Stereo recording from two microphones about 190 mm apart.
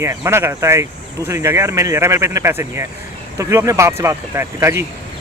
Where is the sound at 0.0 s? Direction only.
15° right (ahead or behind).